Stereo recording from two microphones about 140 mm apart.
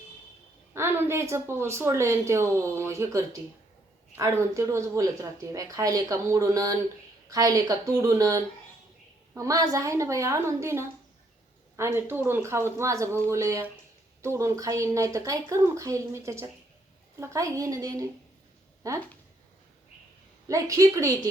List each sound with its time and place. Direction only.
0.7 s speech: 20° right (ahead or behind)
20.5 s speech: 20° right (ahead or behind)